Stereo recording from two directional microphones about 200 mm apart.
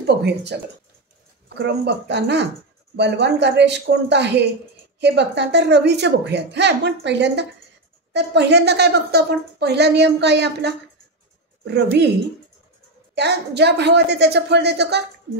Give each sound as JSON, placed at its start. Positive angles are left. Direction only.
{"t": 0.0, "sound": "a woman's voice", "side_deg": -60}
{"t": 13.1, "sound": "a woman's voice", "side_deg": -55}